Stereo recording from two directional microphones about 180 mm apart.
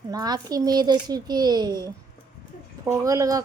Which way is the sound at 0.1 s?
20° right (ahead or behind).